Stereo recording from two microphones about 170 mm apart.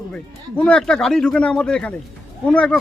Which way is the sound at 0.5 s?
5° left (ahead or behind).